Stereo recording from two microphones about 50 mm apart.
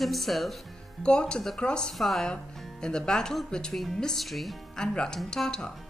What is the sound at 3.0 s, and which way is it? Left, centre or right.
Speech, centre.